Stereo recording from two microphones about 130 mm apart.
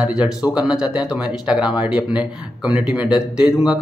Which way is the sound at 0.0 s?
5° right (ahead or behind).